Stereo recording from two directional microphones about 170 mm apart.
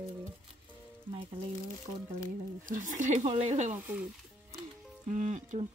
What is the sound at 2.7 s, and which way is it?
Speech, 50° right (ahead or behind).